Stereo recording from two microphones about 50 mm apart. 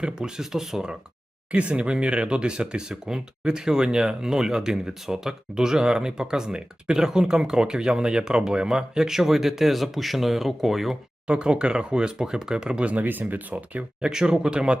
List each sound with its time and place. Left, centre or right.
0.0 s speech: centre
1.5 s speech: right; by 10.9 s centre
11.3 s speech: right
14.1 s speech: centre